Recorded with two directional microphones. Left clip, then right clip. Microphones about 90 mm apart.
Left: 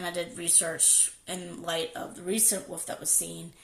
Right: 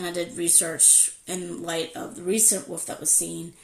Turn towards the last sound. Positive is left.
turn(degrees=30)  # may be behind; listen again after turning